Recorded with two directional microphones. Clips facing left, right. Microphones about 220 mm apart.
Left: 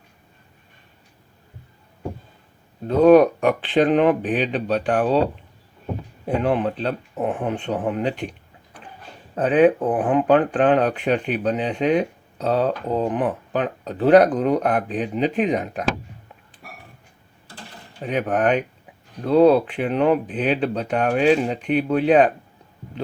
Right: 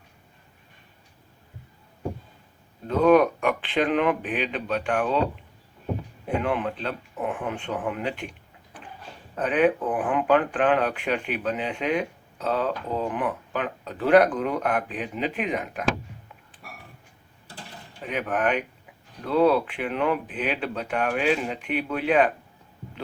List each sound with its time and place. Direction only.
2.8 s speech: 35° left (ahead or behind)
6.2 s speech: 35° left (ahead or behind)
18.0 s speech: 35° left (ahead or behind)